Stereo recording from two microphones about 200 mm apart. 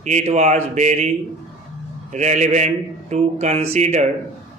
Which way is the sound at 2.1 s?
35° right (ahead or behind).